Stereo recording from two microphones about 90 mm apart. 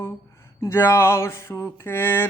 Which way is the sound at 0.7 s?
25° left (ahead or behind).